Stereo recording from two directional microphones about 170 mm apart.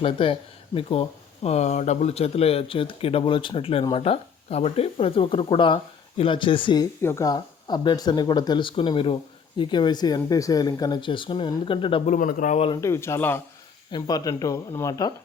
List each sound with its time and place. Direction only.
0.0 s speech: 30° left (ahead or behind)
7.0 s speech: 15° left (ahead or behind)
12.0 s speech: 50° left (ahead or behind)
12.7 s speech: 15° left (ahead or behind)
13.9 s speech: 25° left (ahead or behind)